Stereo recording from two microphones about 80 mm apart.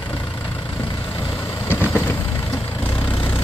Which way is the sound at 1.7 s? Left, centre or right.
Left.